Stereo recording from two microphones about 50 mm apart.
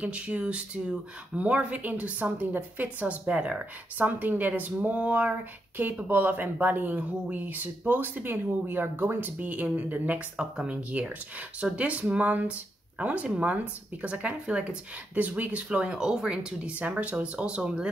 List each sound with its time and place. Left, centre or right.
0.0 s speech: right
3.5 s speech: right
10.3 s speech: centre
10.7 s speech: right